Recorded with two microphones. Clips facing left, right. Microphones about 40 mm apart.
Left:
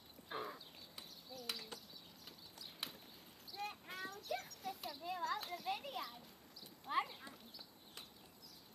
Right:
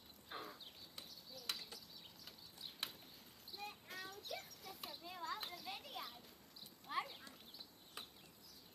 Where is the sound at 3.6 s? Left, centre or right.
Left.